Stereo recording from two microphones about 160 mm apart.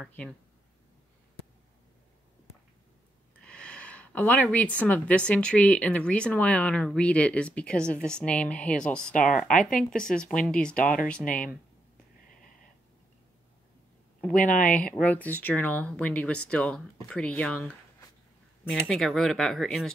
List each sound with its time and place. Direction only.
0.0 s speech: 10° left (ahead or behind)
3.4 s speech: 5° left (ahead or behind)
9.5 s speech: 55° left (ahead or behind)
9.8 s speech: 5° left (ahead or behind)
10.8 s speech: 60° left (ahead or behind)
14.4 s speech: 55° left (ahead or behind)
15.0 s speech: 10° left (ahead or behind)